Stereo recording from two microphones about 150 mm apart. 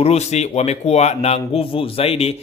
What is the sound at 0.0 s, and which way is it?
Speech, 45° left (ahead or behind).